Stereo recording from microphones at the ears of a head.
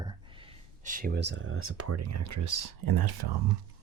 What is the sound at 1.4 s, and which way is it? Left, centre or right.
Speech, right.